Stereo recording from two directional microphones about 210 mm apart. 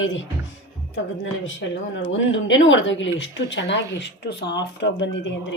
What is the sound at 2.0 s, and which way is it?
Speech, 65° left (ahead or behind).